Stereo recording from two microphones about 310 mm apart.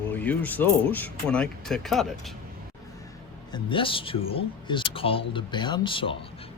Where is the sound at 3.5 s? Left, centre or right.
Centre.